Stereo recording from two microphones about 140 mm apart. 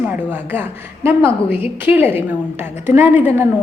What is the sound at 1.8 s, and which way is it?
A woman's voice, 15° right (ahead or behind).